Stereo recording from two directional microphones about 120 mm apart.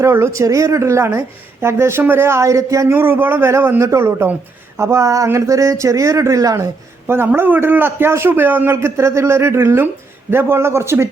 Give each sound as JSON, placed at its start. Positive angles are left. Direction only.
{"t": 0.0, "sound": "a man's voice", "side_deg": -25}